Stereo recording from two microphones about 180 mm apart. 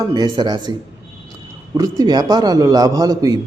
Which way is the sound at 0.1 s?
25° right (ahead or behind).